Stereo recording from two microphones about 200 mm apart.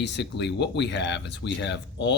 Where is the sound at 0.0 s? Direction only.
60° left (ahead or behind).